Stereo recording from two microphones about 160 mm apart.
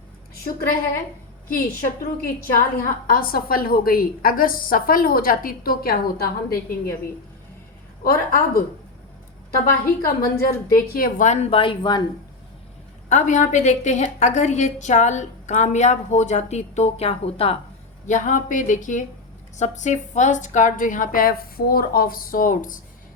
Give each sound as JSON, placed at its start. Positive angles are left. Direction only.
{"t": 1.5, "sound": "a woman's voice", "side_deg": 65}
{"t": 8.0, "sound": "a woman's voice", "side_deg": 65}
{"t": 9.8, "sound": "a woman's voice", "side_deg": 65}
{"t": 11.3, "sound": "speech", "side_deg": 40}
{"t": 13.1, "sound": "a woman's voice", "side_deg": 50}
{"t": 18.0, "sound": "a woman's voice", "side_deg": 50}